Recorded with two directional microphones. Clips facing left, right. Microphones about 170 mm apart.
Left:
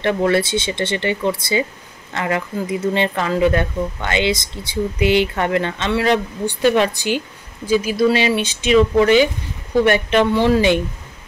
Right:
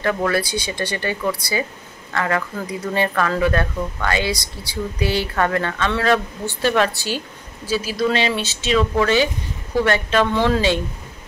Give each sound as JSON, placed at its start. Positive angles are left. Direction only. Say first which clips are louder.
{"t": 0.0, "sound": "speech", "louder": "left 3 dB", "side_deg": 25}